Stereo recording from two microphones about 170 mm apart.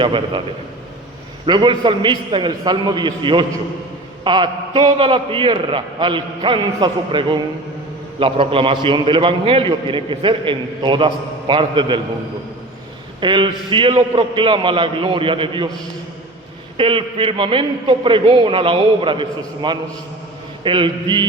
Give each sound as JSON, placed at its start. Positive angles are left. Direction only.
{"t": 0.0, "sound": "a man's voice", "side_deg": -30}
{"t": 1.5, "sound": "a man's voice", "side_deg": -25}
{"t": 13.1, "sound": "a man's voice", "side_deg": -30}
{"t": 16.7, "sound": "a man's voice", "side_deg": -30}